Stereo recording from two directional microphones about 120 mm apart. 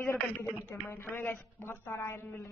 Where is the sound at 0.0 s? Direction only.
25° left (ahead or behind).